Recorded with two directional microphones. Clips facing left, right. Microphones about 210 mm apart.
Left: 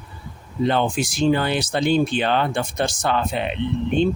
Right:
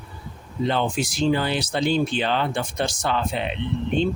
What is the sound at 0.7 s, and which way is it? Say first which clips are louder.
Speech: left 2 dB; 50° left (ahead or behind).